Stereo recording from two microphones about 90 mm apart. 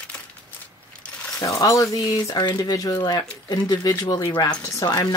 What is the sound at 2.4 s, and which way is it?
Speech, 55° left (ahead or behind).